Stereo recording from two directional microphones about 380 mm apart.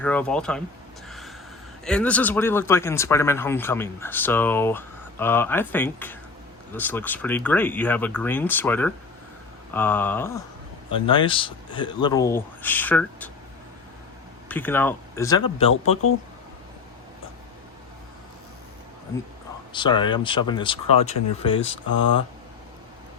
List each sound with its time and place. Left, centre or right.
0.0 s speech: centre
1.0 s gasp: centre
1.8 s speech: centre
14.4 s speech: centre
19.7 s speech: centre
21.9 s speech: left